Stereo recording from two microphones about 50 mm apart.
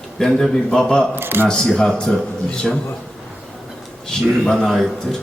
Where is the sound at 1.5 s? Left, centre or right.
Centre.